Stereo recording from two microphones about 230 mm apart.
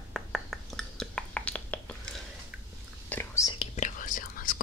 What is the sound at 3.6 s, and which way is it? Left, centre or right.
Whispering, left.